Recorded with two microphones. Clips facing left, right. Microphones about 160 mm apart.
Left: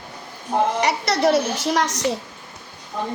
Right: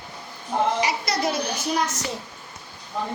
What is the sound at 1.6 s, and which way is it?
Speech, 85° left.